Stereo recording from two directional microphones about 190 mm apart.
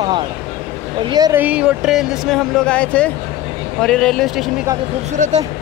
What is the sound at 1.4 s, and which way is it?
Speech, 5° right (ahead or behind).